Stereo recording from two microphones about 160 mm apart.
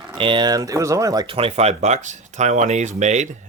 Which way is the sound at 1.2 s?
35° right (ahead or behind).